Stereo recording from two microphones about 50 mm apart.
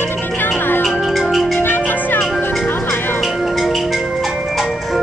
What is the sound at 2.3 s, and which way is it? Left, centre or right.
Music, centre.